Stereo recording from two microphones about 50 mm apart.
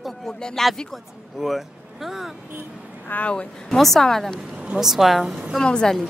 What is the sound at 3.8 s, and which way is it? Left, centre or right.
Speech, centre.